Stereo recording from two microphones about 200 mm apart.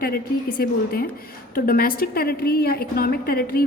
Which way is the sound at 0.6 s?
50° left (ahead or behind).